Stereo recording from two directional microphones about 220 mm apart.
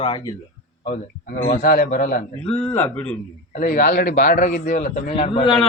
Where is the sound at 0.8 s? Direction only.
40° left (ahead or behind).